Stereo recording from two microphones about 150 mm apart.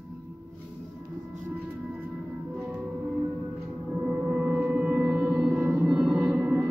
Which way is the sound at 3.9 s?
5° right (ahead or behind).